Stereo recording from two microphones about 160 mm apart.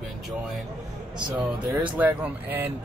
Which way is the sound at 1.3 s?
10° right (ahead or behind).